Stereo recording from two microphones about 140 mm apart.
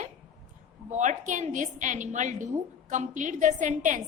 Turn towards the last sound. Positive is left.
turn(degrees=-65)  # may be behind; listen again after turning